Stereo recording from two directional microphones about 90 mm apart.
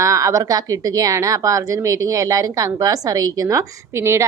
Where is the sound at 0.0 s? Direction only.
35° right (ahead or behind).